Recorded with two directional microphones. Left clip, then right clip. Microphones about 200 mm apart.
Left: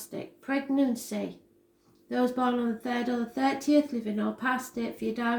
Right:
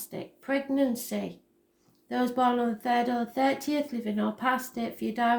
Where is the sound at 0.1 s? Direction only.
45° right (ahead or behind).